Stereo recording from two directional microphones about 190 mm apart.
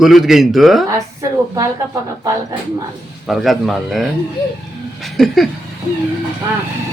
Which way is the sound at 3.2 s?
Centre (ahead or behind).